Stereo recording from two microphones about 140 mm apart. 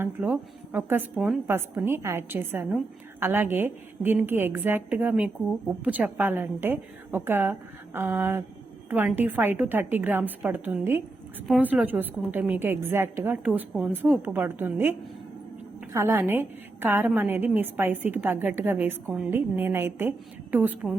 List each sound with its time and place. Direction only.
0.0 s a woman's voice: 15° right (ahead or behind)